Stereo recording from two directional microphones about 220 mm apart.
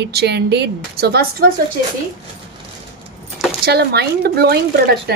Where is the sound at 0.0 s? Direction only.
50° right (ahead or behind).